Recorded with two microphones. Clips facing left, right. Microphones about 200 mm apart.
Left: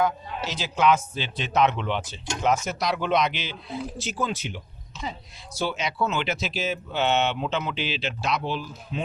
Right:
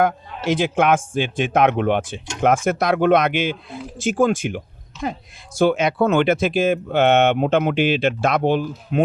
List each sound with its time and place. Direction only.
0.0 s a man's voice: 55° right (ahead or behind)